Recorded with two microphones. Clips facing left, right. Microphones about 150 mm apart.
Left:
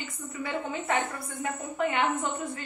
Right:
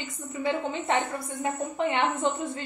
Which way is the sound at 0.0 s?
20° right (ahead or behind).